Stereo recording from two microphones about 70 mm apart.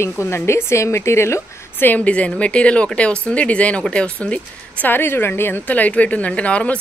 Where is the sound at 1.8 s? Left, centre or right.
Left.